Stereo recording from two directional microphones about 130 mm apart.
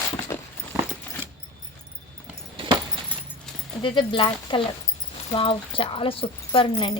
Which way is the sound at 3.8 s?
40° left (ahead or behind).